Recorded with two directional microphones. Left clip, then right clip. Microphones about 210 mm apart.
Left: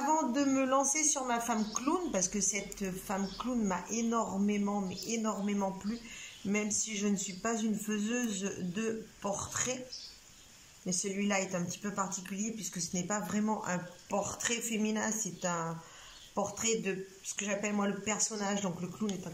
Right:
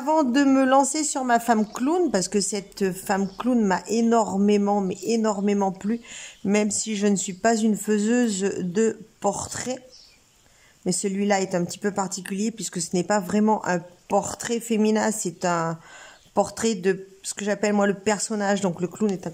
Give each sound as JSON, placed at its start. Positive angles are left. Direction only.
{"t": 0.0, "sound": "a woman's voice", "side_deg": -45}
{"t": 10.9, "sound": "speech", "side_deg": -40}